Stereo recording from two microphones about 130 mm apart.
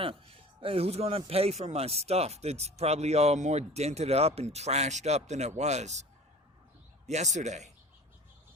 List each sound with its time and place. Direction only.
0.6 s speech: 50° right (ahead or behind)
7.1 s speech: 65° right (ahead or behind)